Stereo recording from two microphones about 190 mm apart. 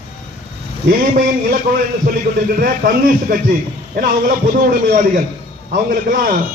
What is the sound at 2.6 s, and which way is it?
A man's voice, 50° right (ahead or behind).